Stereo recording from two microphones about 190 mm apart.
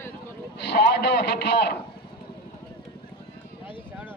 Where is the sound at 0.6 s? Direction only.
60° left (ahead or behind).